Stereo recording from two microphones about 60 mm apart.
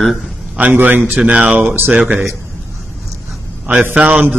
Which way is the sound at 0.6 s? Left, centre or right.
Right.